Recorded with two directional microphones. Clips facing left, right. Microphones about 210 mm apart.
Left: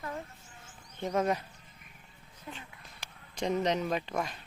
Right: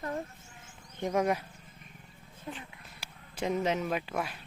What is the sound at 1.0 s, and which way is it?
Speech, 10° right (ahead or behind).